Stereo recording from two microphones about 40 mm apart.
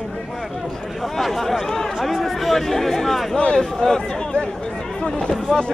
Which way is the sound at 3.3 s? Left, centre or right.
Left.